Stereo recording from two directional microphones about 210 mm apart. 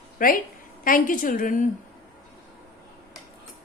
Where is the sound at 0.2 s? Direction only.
40° left (ahead or behind).